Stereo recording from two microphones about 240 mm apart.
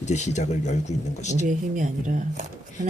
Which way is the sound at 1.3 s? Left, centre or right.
Right.